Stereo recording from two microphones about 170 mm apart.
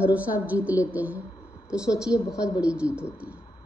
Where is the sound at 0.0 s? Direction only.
10° right (ahead or behind).